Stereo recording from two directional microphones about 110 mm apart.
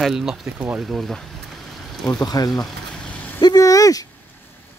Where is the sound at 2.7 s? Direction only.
10° left (ahead or behind).